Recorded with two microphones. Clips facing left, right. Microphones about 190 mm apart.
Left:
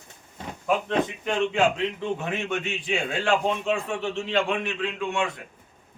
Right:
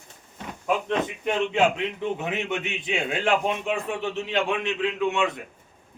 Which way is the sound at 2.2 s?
20° right (ahead or behind).